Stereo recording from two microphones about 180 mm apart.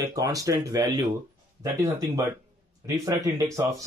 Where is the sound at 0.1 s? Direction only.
20° right (ahead or behind).